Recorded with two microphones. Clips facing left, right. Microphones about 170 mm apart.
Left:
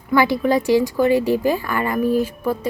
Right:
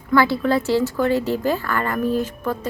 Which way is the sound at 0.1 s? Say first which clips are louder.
Left 1 dB; 15° left (ahead or behind).